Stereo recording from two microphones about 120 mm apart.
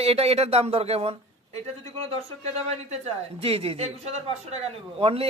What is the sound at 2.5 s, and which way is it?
Speech, 60° right (ahead or behind).